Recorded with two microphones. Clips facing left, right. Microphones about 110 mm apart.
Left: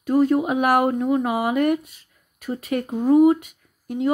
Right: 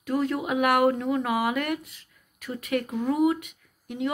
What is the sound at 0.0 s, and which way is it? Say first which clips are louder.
Speech: left 8 dB; 30° left (ahead or behind).